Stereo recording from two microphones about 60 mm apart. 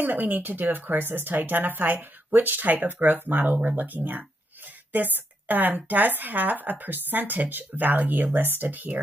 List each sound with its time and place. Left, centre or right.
0.0 s a woman's voice: right